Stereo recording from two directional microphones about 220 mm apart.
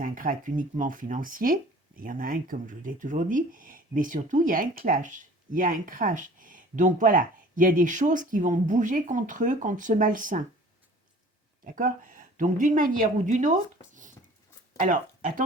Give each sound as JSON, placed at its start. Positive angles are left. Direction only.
{"t": 0.0, "sound": "speech", "side_deg": -40}
{"t": 11.6, "sound": "a woman's voice", "side_deg": -40}